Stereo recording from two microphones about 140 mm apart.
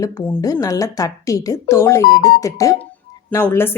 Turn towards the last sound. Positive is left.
turn(degrees=15)  # may be behind; listen again after turning